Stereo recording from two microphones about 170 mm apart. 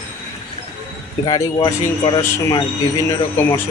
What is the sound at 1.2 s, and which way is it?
Speech, 25° left (ahead or behind).